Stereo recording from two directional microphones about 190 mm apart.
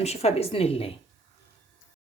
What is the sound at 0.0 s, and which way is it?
Speech, 35° left (ahead or behind).